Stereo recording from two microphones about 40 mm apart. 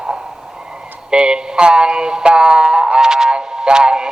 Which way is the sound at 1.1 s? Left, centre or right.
Right.